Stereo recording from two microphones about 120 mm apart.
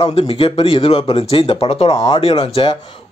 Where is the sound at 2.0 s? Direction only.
45° left (ahead or behind).